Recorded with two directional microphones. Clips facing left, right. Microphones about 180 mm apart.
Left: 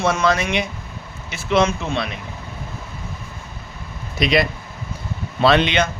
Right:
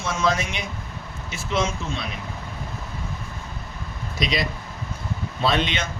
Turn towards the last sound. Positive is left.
turn(degrees=70)  # may be behind; listen again after turning